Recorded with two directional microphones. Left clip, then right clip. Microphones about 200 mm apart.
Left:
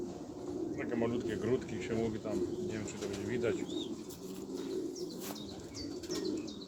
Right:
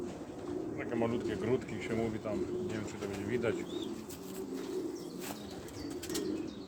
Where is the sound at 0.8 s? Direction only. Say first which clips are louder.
Right 1 dB; 15° right (ahead or behind).